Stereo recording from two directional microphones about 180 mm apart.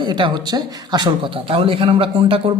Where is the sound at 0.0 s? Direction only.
25° right (ahead or behind).